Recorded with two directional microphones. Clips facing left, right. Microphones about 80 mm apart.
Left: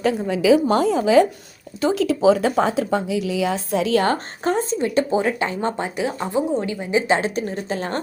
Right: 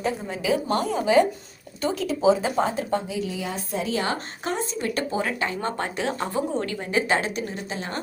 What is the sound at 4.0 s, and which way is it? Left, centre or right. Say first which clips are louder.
Speech: left 7 dB; left.